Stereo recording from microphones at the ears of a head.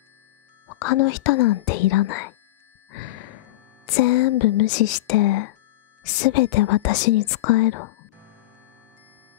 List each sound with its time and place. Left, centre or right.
0.7 s speech: left